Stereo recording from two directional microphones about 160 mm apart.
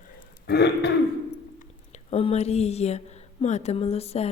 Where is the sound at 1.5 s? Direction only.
45° left (ahead or behind).